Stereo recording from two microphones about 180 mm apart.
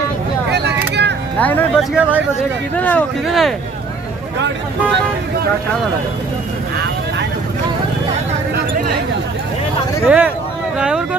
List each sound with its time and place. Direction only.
0.5 s vehicle: 70° right (ahead or behind)
1.4 s speech: 10° left (ahead or behind)
1.8 s speech: 10° right (ahead or behind)
2.8 s speech: 10° left (ahead or behind)
10.0 s speech: 5° right (ahead or behind)